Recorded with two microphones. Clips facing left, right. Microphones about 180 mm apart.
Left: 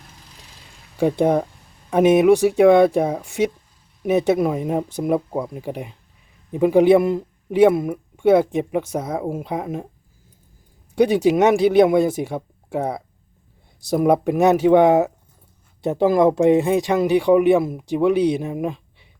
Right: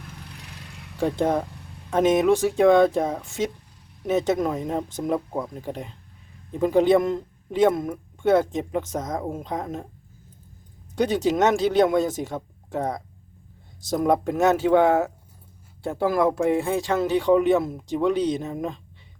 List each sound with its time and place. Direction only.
0.0 s vehicle: 65° right (ahead or behind)
0.9 s a man's voice: 15° left (ahead or behind)
10.9 s a man's voice: 10° left (ahead or behind)